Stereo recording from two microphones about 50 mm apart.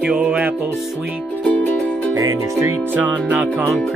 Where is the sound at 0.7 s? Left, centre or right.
Centre.